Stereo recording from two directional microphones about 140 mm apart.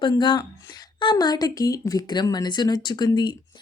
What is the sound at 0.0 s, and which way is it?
A woman's voice, 35° left (ahead or behind).